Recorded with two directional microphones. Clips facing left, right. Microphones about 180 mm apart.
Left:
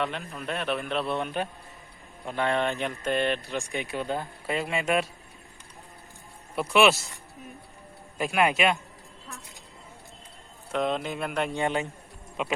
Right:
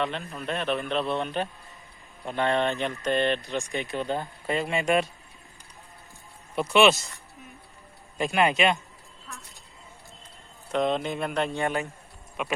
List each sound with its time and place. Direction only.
0.0 s a man's voice: 5° left (ahead or behind)
6.6 s speech: 5° left (ahead or behind)
8.2 s speech: 5° left (ahead or behind)
10.7 s speech: 5° left (ahead or behind)
11.4 s a man's voice: 20° left (ahead or behind)